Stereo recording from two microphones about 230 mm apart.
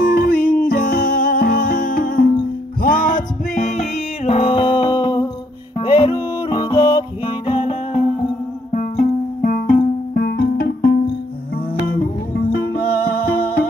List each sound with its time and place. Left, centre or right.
0.0 s music: left
8.7 s music: left